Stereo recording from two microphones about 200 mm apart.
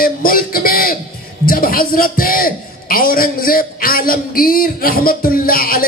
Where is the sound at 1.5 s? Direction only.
45° left (ahead or behind).